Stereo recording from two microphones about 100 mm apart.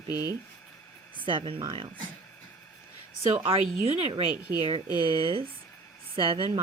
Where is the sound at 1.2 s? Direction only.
55° right (ahead or behind).